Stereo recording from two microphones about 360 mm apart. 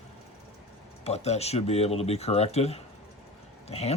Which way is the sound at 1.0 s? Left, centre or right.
Centre.